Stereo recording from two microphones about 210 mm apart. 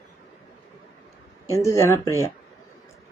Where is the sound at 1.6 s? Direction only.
15° left (ahead or behind).